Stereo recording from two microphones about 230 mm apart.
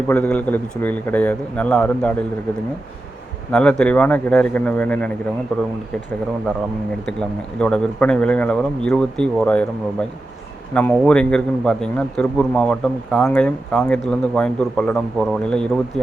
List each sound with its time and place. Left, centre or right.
0.1 s a man's voice: centre
3.5 s a man's voice: centre
7.6 s a man's voice: centre
10.8 s a man's voice: centre